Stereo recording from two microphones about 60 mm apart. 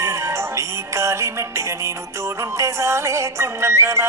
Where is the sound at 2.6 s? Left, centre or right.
Right.